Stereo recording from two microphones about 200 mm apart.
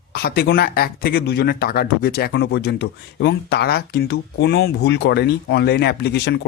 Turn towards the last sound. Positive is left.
turn(degrees=55)  # may be behind; listen again after turning